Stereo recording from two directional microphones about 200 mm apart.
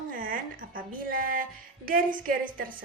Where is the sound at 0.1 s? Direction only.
45° right (ahead or behind).